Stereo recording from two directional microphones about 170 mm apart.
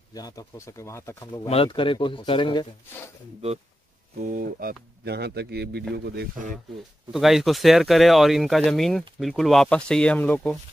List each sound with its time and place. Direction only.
0.1 s speech: 20° left (ahead or behind)
1.5 s a man's voice: 30° left (ahead or behind)
4.2 s speech: 55° right (ahead or behind); by 5.9 s 70° right (ahead or behind)
7.1 s speech: centre (ahead or behind)